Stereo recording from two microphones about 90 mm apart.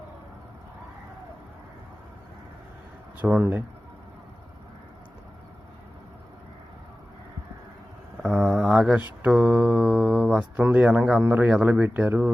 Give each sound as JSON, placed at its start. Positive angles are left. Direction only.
{"t": 3.3, "sound": "speech", "side_deg": -25}
{"t": 8.2, "sound": "mantra", "side_deg": -5}
{"t": 9.2, "sound": "speech", "side_deg": -10}